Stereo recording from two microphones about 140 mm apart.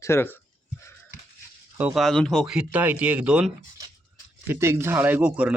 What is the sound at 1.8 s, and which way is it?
Speech, 5° right (ahead or behind).